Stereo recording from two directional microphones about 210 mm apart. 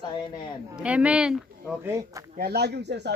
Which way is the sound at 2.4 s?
50° right (ahead or behind).